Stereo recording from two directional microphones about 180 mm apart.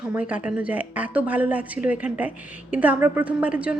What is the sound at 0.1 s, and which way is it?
A woman's voice, 10° right (ahead or behind).